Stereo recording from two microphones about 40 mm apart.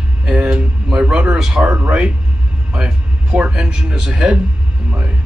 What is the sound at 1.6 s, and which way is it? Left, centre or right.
Speech, right.